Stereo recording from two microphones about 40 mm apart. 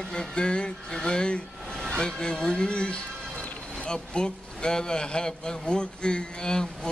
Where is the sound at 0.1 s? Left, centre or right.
Left.